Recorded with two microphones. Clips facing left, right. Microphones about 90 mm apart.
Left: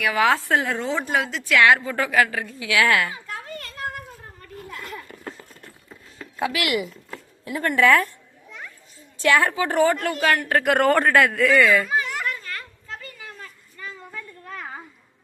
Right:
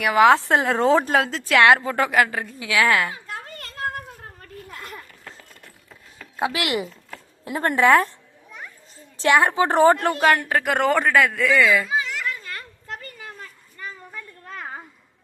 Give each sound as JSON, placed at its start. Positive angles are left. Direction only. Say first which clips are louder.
{"t": 0.0, "sound": "speech", "louder": "right 5 dB", "side_deg": -25}
{"t": 0.8, "sound": "speech", "louder": "right 6 dB", "side_deg": -40}
{"t": 5.0, "sound": "a sound", "louder": "left 6 dB", "side_deg": 35}
{"t": 6.3, "sound": "speech", "louder": "even", "side_deg": -25}
{"t": 9.3, "sound": "speech", "louder": "right 3 dB", "side_deg": -25}
{"t": 10.5, "sound": "speech", "louder": "left 2 dB", "side_deg": 0}